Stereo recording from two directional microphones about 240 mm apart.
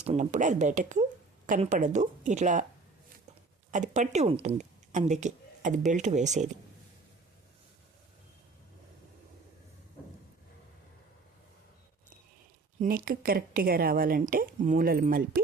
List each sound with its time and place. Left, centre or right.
0.0 s speech: right
3.7 s speech: right
12.8 s speech: right